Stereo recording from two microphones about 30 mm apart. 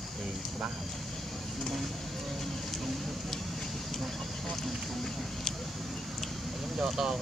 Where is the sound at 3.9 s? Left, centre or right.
Centre.